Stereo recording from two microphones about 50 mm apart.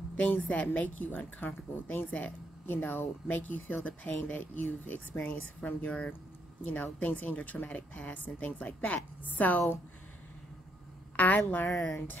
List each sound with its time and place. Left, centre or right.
0.3 s a woman's voice: left
11.1 s a woman's voice: left